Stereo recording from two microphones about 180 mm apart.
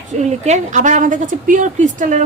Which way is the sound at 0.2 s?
40° right (ahead or behind).